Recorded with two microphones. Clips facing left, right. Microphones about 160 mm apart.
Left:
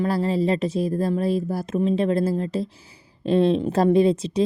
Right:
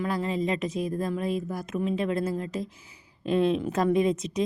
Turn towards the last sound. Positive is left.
turn(degrees=30)  # may be behind; listen again after turning